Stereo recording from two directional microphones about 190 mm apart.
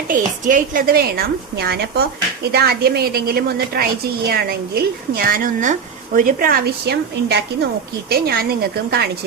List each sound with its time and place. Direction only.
0.4 s a woman's voice: 45° right (ahead or behind)